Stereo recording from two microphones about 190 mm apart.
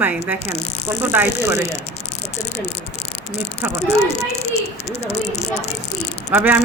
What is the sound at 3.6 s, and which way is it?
Speech, 10° right (ahead or behind).